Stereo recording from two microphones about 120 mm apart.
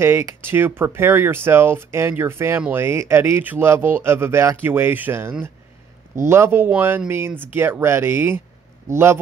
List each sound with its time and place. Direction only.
0.0 s speech: 20° right (ahead or behind)